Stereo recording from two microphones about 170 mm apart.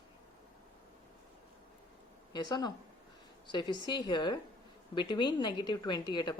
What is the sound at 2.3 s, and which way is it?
A woman's voice, 25° left (ahead or behind).